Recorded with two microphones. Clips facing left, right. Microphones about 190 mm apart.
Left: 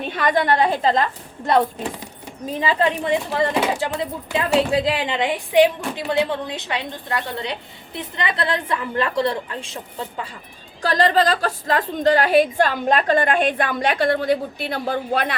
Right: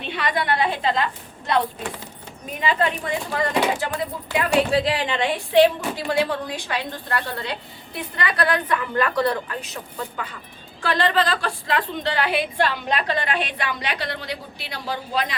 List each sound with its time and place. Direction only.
0.0 s a woman's voice: 45° left (ahead or behind)
2.5 s a woman's voice: 25° left (ahead or behind)
10.8 s a woman's voice: 40° left (ahead or behind); by 15.4 s 55° left (ahead or behind)